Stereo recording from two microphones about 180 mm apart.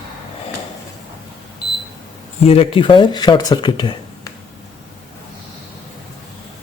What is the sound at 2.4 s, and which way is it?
Speech, 35° left (ahead or behind).